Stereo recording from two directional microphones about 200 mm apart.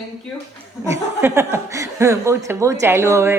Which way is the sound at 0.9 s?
15° right (ahead or behind).